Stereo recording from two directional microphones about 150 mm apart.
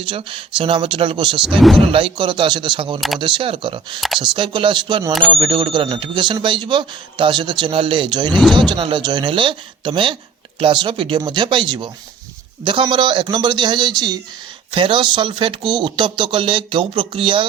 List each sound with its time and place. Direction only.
0.0 s speech: 35° right (ahead or behind)
1.5 s speech: centre (ahead or behind)
1.8 s speech: 40° right (ahead or behind)
8.3 s speech: centre (ahead or behind)
8.7 s speech: 30° right (ahead or behind)